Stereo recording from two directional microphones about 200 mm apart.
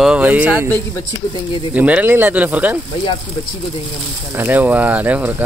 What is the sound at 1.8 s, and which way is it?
Speech, 5° right (ahead or behind).